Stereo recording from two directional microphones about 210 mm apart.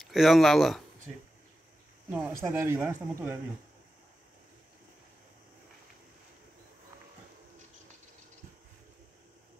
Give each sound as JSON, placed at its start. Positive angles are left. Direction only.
{"t": 0.0, "sound": "speech", "side_deg": 0}
{"t": 2.0, "sound": "speech", "side_deg": -10}